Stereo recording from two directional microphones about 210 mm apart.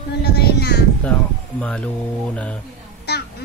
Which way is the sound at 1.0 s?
5° left (ahead or behind).